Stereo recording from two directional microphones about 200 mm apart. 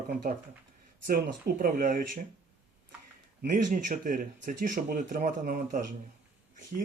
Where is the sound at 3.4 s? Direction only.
40° right (ahead or behind).